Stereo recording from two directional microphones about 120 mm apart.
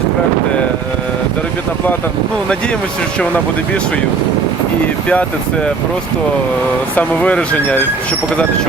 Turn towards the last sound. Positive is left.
turn(degrees=10)  # may be behind; listen again after turning